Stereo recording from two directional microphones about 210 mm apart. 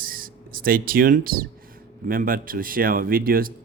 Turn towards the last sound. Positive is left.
turn(degrees=-45)  # may be behind; listen again after turning